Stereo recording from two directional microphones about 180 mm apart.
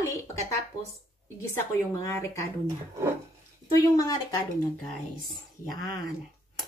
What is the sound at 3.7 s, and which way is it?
Speech, 20° left (ahead or behind).